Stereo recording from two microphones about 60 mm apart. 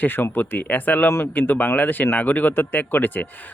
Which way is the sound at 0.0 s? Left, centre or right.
Left.